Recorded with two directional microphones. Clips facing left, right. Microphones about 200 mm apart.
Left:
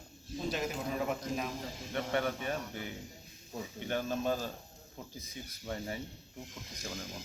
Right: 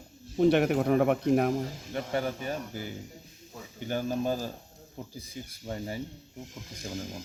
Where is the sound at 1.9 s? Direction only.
30° right (ahead or behind).